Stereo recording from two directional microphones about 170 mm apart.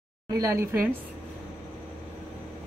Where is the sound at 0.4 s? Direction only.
15° right (ahead or behind).